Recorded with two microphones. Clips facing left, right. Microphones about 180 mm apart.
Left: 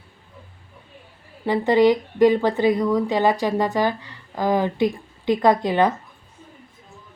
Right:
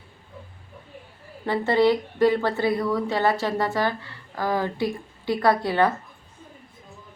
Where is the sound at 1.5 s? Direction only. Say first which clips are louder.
Left 3 dB; 15° left (ahead or behind).